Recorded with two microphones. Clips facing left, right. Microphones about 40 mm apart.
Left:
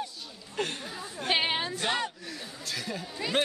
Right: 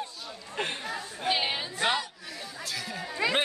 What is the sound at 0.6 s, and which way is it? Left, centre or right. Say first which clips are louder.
Chatter: even; right.